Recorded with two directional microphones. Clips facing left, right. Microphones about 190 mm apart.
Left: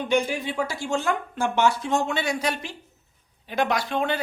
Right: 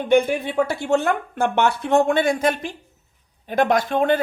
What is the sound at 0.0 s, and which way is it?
A woman's voice, 55° right (ahead or behind).